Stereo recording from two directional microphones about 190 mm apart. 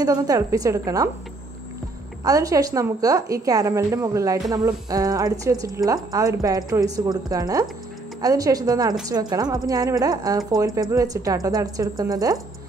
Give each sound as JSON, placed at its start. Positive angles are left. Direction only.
{"t": 0.0, "sound": "speech", "side_deg": -20}
{"t": 2.2, "sound": "a woman's voice", "side_deg": -20}